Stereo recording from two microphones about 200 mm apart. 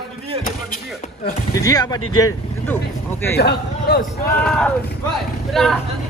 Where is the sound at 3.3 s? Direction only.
55° left (ahead or behind).